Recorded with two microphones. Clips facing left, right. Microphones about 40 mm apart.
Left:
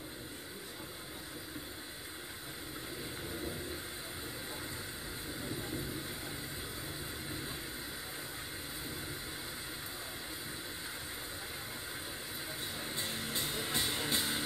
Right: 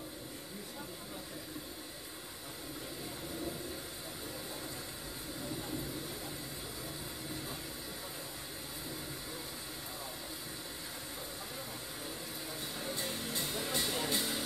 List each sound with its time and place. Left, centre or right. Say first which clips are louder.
12.8 s music: right 2 dB; left